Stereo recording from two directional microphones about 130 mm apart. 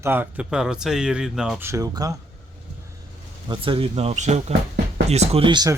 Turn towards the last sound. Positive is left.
turn(degrees=-35)  # may be behind; listen again after turning